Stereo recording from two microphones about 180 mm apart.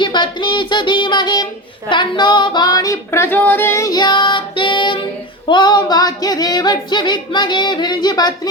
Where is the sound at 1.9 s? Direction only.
25° left (ahead or behind).